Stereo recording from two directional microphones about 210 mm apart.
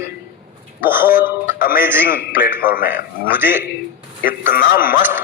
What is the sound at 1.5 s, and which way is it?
Music, 45° left (ahead or behind).